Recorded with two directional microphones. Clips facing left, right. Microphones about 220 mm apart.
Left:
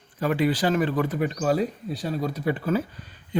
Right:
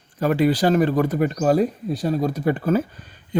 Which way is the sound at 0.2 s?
40° right (ahead or behind).